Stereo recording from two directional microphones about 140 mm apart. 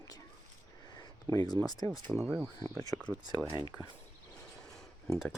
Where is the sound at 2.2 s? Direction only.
5° right (ahead or behind).